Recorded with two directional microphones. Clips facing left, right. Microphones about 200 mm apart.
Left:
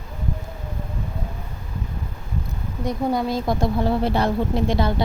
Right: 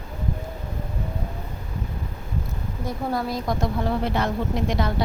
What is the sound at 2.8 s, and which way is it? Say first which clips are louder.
Speech: left 4 dB; 20° left (ahead or behind).